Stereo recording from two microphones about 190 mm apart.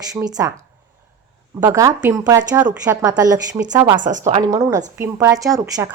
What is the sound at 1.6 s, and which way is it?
A woman's voice, 15° right (ahead or behind).